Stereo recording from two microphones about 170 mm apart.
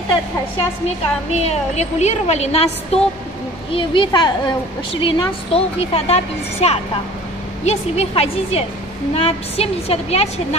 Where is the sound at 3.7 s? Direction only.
30° left (ahead or behind).